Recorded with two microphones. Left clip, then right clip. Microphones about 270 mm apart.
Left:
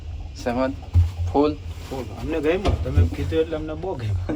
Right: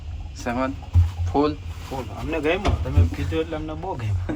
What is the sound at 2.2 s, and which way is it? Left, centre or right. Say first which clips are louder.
Speech: left 1 dB; right.